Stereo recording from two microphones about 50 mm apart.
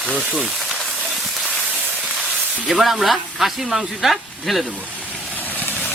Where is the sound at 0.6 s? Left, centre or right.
Centre.